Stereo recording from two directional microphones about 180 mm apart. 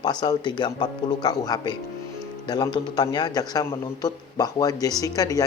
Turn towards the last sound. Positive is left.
turn(degrees=20)  # may be behind; listen again after turning